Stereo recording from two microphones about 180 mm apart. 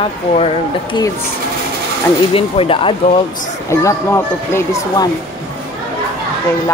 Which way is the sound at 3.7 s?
15° left (ahead or behind).